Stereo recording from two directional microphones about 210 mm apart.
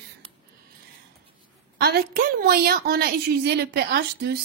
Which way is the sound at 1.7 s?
45° right (ahead or behind).